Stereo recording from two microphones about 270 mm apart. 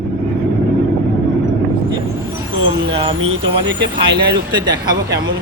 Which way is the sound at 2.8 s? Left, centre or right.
Centre.